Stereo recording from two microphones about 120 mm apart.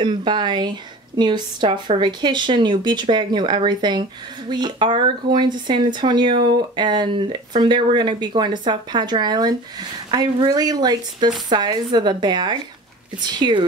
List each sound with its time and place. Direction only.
0.0 s speech: 40° right (ahead or behind)